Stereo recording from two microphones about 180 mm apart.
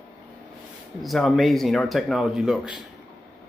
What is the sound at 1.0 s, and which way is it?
Speech, centre (ahead or behind).